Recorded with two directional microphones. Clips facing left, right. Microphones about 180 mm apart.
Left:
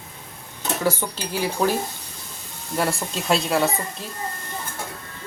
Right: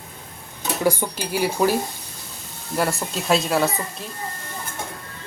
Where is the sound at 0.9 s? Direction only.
15° right (ahead or behind).